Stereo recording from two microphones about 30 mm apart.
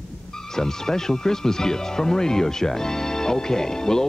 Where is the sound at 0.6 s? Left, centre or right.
Centre.